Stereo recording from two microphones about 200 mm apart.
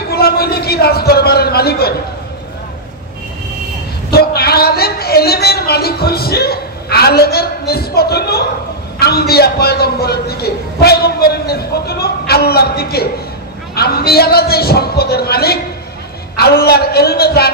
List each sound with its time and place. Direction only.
0.1 s a man's voice: 50° left (ahead or behind)
4.1 s a woman's voice: 50° left (ahead or behind)